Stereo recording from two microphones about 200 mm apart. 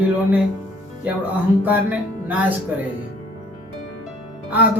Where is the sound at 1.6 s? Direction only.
10° right (ahead or behind).